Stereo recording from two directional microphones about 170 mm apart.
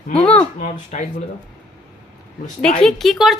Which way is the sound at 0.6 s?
45° left (ahead or behind).